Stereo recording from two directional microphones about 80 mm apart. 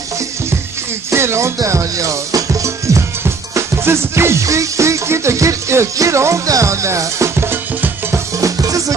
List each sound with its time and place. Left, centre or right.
1.1 s music: right
8.4 s music: right